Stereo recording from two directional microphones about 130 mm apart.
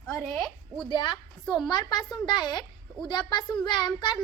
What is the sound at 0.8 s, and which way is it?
A woman's voice, 35° left (ahead or behind).